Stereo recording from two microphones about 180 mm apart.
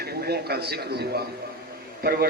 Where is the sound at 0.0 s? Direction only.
60° right (ahead or behind).